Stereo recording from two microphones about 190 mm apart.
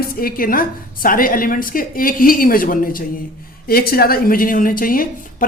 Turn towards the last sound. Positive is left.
turn(degrees=45)  # may be behind; listen again after turning